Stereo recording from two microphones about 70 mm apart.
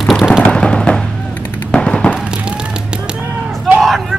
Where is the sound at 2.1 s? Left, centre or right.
Centre.